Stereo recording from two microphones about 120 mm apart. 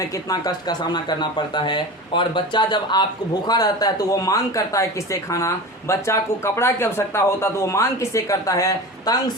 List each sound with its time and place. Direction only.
0.3 s speech: 35° left (ahead or behind)
5.9 s speech: 25° left (ahead or behind)